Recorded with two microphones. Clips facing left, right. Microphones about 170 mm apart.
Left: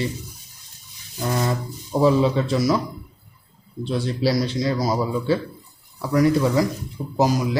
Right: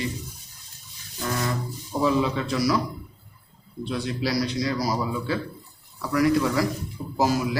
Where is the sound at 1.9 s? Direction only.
30° left (ahead or behind).